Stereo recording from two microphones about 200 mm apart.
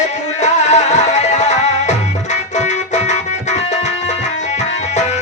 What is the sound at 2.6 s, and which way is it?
Music, 35° left (ahead or behind).